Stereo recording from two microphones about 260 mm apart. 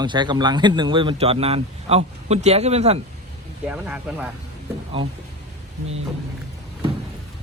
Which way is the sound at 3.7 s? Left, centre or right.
Centre.